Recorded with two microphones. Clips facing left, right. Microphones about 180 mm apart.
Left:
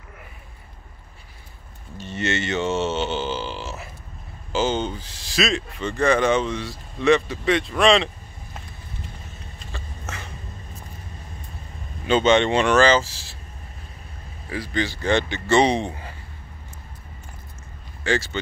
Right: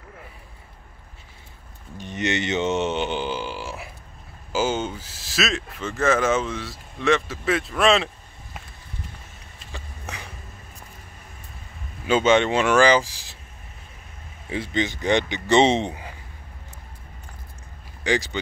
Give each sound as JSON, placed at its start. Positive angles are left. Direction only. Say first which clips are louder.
{"t": 2.0, "sound": "mantra", "louder": "even", "side_deg": -15}
{"t": 4.5, "sound": "speech", "louder": "left 1 dB", "side_deg": -10}
{"t": 9.7, "sound": "a sound", "louder": "left 1 dB", "side_deg": -15}
{"t": 12.1, "sound": "speech", "louder": "left 1 dB", "side_deg": -5}
{"t": 14.5, "sound": "speech", "louder": "right 1 dB", "side_deg": -25}
{"t": 18.0, "sound": "speech", "louder": "even", "side_deg": -15}